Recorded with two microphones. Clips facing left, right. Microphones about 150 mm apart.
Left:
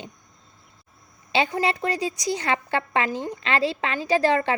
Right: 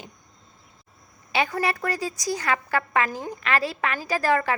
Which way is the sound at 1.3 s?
25° left (ahead or behind).